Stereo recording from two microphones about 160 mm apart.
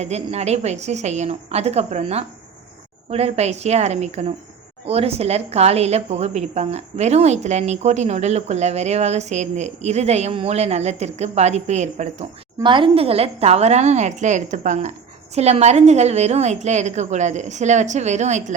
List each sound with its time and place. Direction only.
0.0 s a woman's voice: 40° right (ahead or behind)
12.6 s a woman's voice: 30° right (ahead or behind); by 18.5 s 45° right (ahead or behind)